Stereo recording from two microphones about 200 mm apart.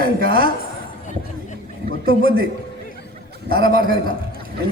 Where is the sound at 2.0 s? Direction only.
45° right (ahead or behind).